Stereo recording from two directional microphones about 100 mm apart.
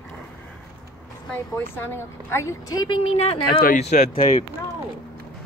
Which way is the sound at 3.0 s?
85° left.